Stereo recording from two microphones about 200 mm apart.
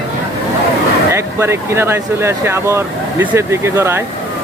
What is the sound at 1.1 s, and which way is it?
Speech, 15° right (ahead or behind).